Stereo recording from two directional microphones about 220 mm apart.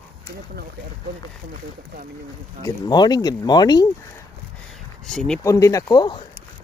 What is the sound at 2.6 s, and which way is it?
Speech, 20° left (ahead or behind).